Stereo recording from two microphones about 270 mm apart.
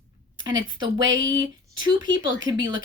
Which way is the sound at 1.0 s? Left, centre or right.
Right.